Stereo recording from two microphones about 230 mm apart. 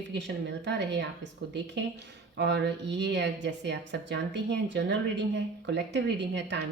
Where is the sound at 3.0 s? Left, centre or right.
Right.